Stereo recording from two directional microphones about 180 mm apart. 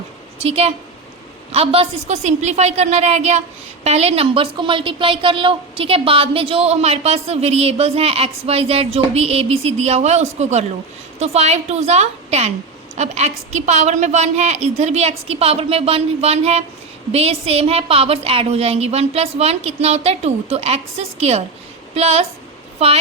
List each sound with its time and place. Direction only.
0.3 s a woman's voice: 35° right (ahead or behind)